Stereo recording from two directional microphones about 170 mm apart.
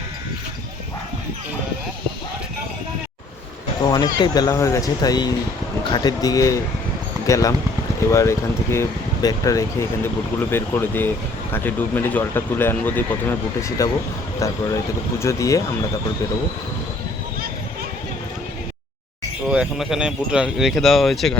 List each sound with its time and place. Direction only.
3.8 s speech: 25° left (ahead or behind)
19.5 s speech: 5° right (ahead or behind)